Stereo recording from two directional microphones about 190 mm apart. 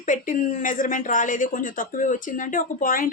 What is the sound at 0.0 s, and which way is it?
A woman's voice, 45° left (ahead or behind).